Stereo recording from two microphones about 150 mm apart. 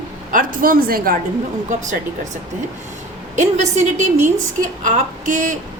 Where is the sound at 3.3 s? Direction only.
55° right (ahead or behind).